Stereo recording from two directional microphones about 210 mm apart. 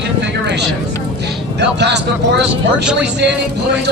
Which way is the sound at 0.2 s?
55° right (ahead or behind).